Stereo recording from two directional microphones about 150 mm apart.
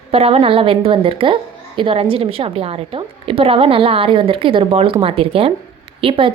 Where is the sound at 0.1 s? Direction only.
40° right (ahead or behind).